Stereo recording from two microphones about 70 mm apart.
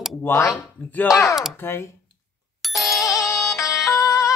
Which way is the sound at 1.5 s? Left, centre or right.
Left.